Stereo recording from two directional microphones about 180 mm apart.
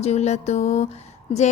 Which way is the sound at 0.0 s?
40° left (ahead or behind).